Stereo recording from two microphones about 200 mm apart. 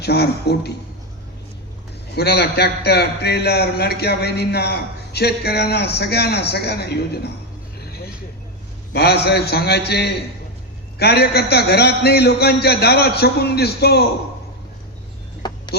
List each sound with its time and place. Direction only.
0.0 s a man's voice: 55° left (ahead or behind)
2.1 s a man's voice: 55° left (ahead or behind)
7.9 s vehicle: 50° left (ahead or behind)
8.9 s a man's voice: 55° left (ahead or behind)
15.4 s music: 20° left (ahead or behind)